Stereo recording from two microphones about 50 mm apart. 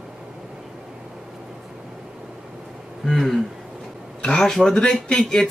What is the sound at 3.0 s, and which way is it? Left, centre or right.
Speech, centre.